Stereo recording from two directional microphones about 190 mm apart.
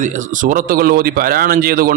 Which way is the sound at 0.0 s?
40° right (ahead or behind).